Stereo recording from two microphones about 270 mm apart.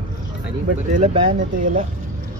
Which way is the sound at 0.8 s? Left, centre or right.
Right.